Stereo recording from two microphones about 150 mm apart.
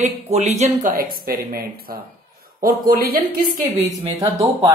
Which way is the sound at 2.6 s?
75° right (ahead or behind).